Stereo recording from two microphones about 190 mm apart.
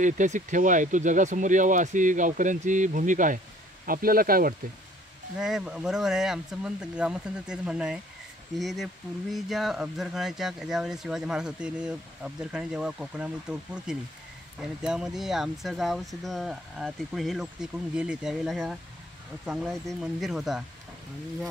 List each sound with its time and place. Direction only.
0.0 s speech: 40° right (ahead or behind)
5.4 s speech: 5° right (ahead or behind)